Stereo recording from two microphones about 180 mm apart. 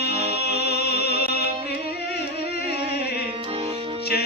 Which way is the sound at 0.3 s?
65° left (ahead or behind).